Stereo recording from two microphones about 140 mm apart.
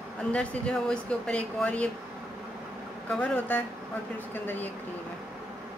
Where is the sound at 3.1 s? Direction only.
10° left (ahead or behind).